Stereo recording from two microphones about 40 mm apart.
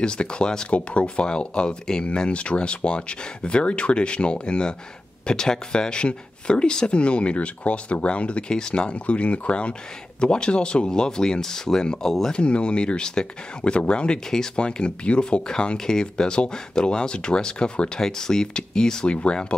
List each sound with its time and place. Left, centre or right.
0.0 s speech: left
0.7 s speech: left; by 12.4 s centre
12.4 s speech: left